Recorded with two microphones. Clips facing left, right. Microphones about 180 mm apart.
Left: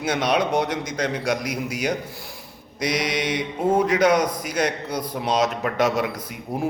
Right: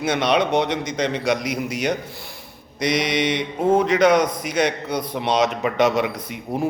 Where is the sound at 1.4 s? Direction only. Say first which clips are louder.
Right 2 dB; 65° right (ahead or behind).